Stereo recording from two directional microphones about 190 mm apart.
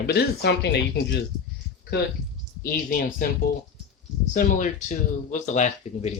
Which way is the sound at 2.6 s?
50° left (ahead or behind).